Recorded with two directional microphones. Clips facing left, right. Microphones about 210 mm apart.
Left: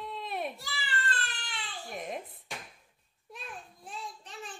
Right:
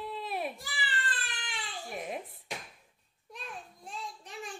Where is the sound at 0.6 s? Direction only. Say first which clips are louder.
Left 1 dB; 15° right (ahead or behind).